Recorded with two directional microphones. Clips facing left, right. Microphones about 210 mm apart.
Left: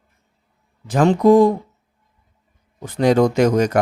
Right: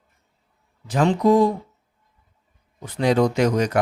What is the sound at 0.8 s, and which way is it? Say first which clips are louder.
Speech: left 4 dB; 50° left (ahead or behind).